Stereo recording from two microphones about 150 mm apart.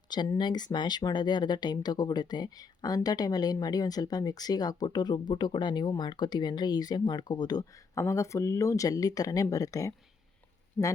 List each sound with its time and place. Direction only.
0.1 s speech: 30° left (ahead or behind)